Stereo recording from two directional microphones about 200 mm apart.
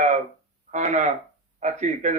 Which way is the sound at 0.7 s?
35° right (ahead or behind).